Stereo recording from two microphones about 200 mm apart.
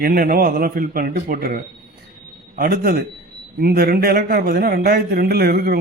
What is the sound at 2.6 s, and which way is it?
A man's voice, 50° right (ahead or behind).